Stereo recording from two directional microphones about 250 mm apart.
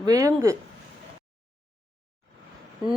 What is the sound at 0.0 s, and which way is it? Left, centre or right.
Speech, centre.